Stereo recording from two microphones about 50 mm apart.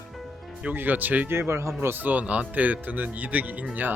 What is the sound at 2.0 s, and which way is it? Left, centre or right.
Speech, right.